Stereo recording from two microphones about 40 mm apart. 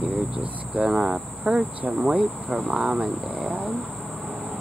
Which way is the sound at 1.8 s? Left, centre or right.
Right.